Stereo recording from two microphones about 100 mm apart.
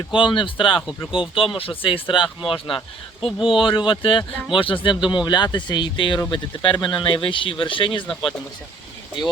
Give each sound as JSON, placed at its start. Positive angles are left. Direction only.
{"t": 0.1, "sound": "speech", "side_deg": 55}
{"t": 3.2, "sound": "speech", "side_deg": -5}
{"t": 3.5, "sound": "speech", "side_deg": 60}